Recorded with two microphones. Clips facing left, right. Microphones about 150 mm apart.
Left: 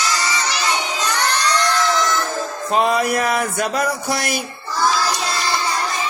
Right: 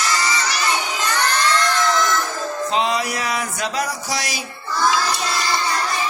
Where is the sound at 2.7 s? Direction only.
50° left (ahead or behind).